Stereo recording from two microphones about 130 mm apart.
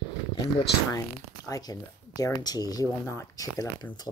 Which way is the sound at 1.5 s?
30° left (ahead or behind).